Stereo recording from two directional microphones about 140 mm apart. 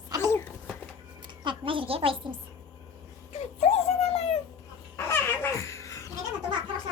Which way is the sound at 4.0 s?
45° left (ahead or behind).